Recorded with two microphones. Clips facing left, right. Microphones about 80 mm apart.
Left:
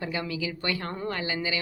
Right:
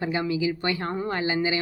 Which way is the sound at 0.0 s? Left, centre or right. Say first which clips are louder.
Right 6 dB; right.